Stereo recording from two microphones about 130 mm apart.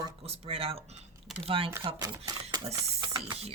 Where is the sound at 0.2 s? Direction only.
50° right (ahead or behind).